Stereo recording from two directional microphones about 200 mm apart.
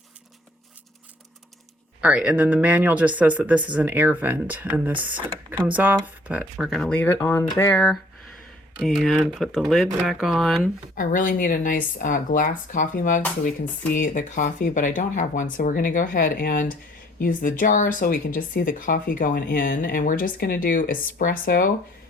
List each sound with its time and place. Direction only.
2.0 s speech: 5° right (ahead or behind)
10.9 s speech: 40° left (ahead or behind)